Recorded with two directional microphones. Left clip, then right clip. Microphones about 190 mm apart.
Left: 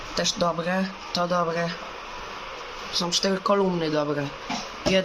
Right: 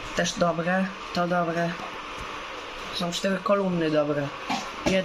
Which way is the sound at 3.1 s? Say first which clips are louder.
Left 1 dB; 10° left (ahead or behind).